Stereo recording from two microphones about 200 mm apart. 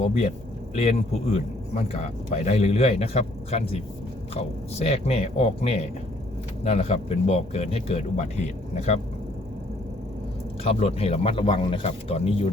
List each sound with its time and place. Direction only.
0.0 s speech: 35° left (ahead or behind)
1.7 s speech: 30° left (ahead or behind)
10.6 s speech: 30° left (ahead or behind)